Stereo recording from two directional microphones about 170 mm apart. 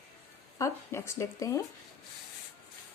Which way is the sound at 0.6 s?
15° left (ahead or behind).